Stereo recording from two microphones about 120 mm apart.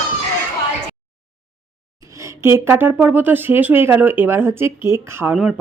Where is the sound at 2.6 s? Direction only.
20° right (ahead or behind).